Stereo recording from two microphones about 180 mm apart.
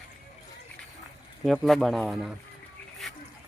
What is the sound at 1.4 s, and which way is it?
Speech, centre (ahead or behind).